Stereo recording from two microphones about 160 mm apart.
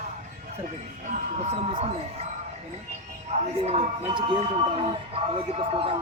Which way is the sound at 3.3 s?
45° right (ahead or behind).